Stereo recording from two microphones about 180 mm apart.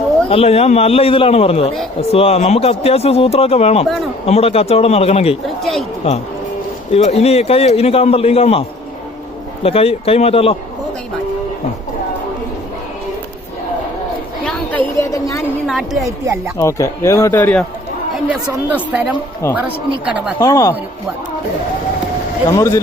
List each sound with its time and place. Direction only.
0.3 s speech: 35° left (ahead or behind)
9.6 s speech: 30° left (ahead or behind)
14.4 s a sound: 10° left (ahead or behind)
15.6 s a sound: centre (ahead or behind)
16.6 s speech: 15° left (ahead or behind)
18.1 s a woman's voice: 10° right (ahead or behind)
19.4 s speech: 15° left (ahead or behind)
20.1 s a woman's voice: 5° right (ahead or behind)
20.4 s speech: 15° left (ahead or behind)
22.4 s speech: 15° left (ahead or behind)